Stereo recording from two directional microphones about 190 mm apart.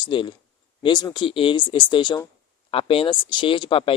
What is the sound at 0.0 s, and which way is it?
Speech, 25° left (ahead or behind).